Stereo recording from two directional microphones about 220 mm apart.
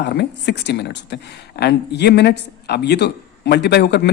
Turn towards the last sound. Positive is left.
turn(degrees=50)  # may be behind; listen again after turning